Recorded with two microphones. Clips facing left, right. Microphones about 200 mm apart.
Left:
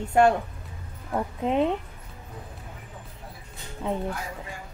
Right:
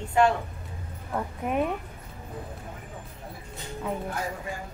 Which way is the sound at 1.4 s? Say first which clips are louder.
Left 4 dB; 25° left (ahead or behind).